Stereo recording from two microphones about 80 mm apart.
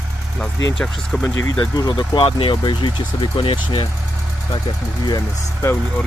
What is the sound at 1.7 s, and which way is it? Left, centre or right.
Speech, left.